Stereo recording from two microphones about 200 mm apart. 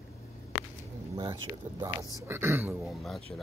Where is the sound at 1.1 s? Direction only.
20° right (ahead or behind).